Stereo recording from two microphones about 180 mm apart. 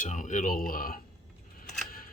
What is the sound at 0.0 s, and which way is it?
Speech, 45° left (ahead or behind).